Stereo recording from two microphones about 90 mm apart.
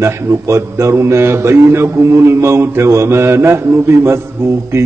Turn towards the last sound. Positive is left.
turn(degrees=-30)  # may be behind; listen again after turning